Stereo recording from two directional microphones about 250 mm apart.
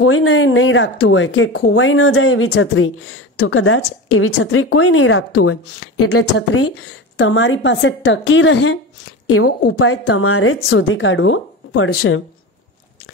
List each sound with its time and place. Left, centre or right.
0.0 s a woman's voice: left